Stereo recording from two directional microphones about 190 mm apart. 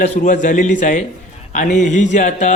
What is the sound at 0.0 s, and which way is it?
A man's voice, 45° left (ahead or behind).